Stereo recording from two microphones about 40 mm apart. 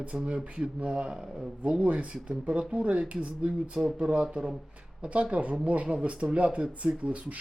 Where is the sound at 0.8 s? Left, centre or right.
Right.